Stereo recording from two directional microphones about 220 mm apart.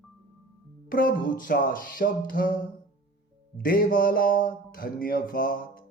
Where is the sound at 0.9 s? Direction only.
40° left (ahead or behind).